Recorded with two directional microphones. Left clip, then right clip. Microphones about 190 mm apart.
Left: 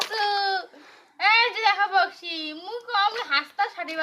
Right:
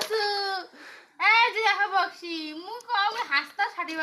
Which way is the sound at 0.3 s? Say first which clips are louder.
Left 4 dB; 40° left (ahead or behind).